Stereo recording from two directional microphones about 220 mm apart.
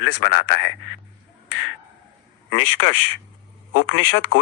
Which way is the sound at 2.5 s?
70° left (ahead or behind).